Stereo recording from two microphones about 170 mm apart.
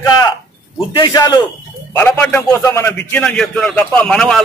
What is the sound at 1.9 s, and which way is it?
Speech, 10° left (ahead or behind).